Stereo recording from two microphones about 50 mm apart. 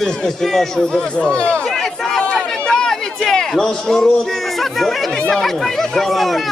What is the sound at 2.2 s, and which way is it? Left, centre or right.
Chatter, centre.